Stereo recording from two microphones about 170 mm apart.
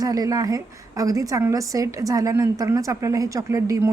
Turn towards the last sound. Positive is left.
turn(degrees=-20)  # may be behind; listen again after turning